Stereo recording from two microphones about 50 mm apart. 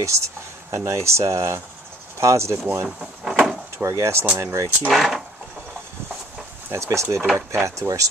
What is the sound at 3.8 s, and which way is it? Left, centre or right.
Speech, right.